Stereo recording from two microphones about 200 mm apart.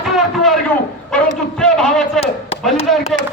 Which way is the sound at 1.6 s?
5° left (ahead or behind).